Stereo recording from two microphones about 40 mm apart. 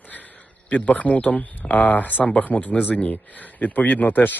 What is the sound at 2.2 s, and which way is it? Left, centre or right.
Speech, left.